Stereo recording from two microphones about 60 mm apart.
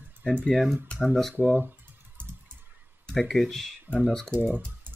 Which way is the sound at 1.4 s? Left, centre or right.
Right.